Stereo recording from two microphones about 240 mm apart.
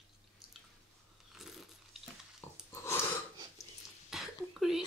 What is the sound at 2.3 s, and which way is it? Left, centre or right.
Chewing, centre.